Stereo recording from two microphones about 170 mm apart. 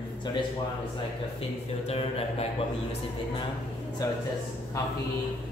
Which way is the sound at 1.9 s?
35° left (ahead or behind).